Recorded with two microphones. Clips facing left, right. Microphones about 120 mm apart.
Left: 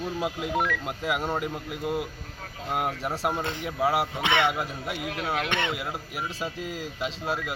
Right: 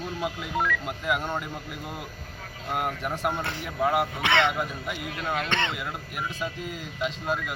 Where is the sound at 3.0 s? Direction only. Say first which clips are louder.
Even; 30° left (ahead or behind).